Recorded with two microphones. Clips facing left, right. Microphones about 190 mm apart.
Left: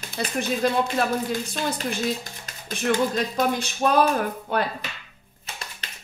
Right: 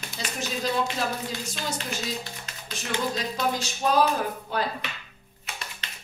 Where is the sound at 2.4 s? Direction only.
55° left (ahead or behind).